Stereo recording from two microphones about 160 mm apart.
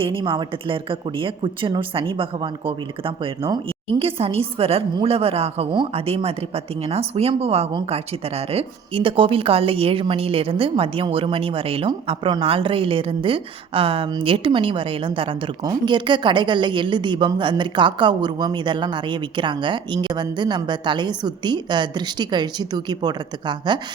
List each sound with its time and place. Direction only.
0.0 s a woman's voice: 30° right (ahead or behind)